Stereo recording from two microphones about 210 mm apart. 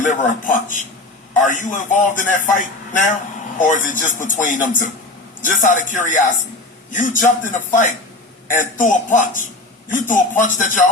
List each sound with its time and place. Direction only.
0.0 s a man's voice: 40° left (ahead or behind)